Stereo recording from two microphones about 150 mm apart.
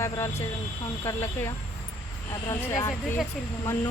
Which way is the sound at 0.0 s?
20° left (ahead or behind).